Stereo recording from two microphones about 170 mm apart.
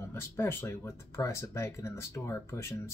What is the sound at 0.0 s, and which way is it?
Speech, 15° left (ahead or behind).